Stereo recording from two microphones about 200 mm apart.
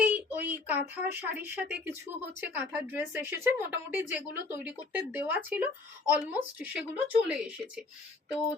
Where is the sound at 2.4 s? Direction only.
10° right (ahead or behind).